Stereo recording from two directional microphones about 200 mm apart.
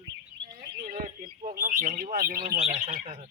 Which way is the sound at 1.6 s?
45° right (ahead or behind).